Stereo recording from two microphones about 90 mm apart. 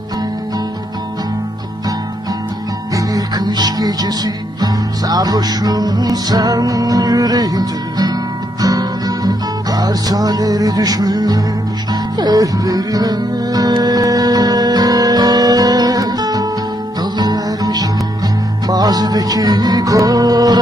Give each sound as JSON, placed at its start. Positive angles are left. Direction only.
{"t": 3.0, "sound": "music", "side_deg": -45}